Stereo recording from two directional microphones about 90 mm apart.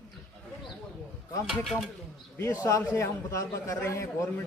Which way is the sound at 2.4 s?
35° left (ahead or behind).